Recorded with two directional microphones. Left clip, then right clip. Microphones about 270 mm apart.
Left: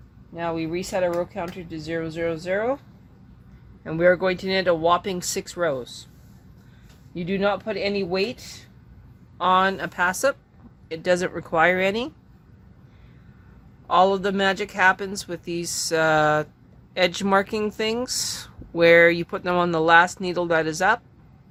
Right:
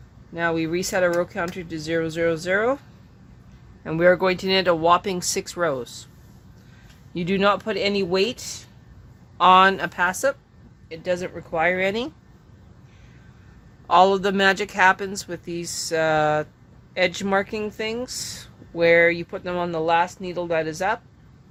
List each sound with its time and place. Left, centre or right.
0.3 s speech: centre
3.8 s speech: centre
7.1 s speech: centre
10.8 s speech: left; by 12.1 s centre
13.8 s a man's voice: centre